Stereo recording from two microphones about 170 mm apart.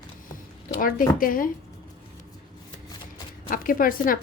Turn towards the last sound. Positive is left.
turn(degrees=55)  # may be behind; listen again after turning